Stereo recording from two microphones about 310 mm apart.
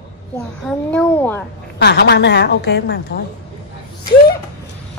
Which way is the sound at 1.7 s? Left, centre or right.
Left.